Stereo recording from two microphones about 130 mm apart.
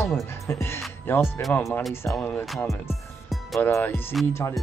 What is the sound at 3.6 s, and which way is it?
Speech, 15° left (ahead or behind).